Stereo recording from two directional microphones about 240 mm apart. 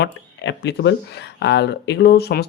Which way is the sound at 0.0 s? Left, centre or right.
Left.